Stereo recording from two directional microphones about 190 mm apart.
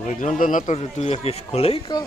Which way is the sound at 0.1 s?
40° left (ahead or behind).